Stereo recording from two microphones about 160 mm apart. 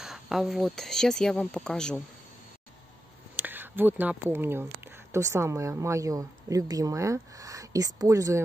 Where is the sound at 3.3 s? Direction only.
10° right (ahead or behind).